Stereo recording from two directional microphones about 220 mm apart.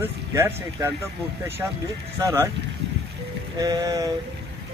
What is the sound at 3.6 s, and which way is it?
Speech, 15° right (ahead or behind).